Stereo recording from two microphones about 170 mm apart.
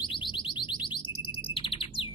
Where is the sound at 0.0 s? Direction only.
30° left (ahead or behind).